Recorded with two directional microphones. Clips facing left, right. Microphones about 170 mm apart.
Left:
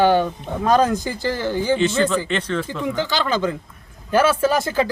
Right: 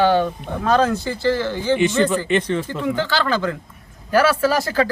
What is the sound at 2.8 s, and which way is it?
Speech, 15° left (ahead or behind).